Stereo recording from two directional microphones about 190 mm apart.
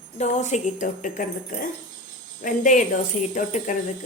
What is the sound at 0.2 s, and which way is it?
A woman's voice, 35° left (ahead or behind).